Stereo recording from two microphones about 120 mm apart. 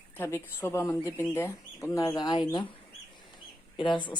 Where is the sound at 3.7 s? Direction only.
40° left (ahead or behind).